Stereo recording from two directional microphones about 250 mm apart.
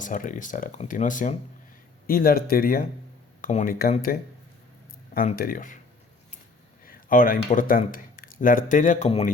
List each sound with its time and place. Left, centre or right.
0.0 s speech: left
5.4 s speech: left
6.8 s speech: left